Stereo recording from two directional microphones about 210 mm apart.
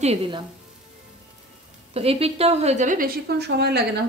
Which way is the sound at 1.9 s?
30° right (ahead or behind).